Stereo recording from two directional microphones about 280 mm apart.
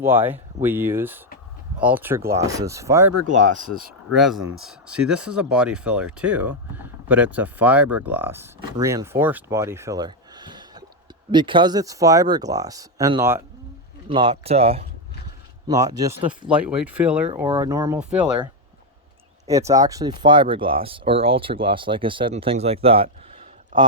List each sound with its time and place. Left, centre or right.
0.0 s speech: centre
3.2 s speech: right
4.2 s speech: centre
19.5 s speech: centre